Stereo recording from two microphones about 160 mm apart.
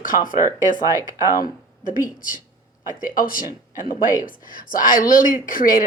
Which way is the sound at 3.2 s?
60° left (ahead or behind).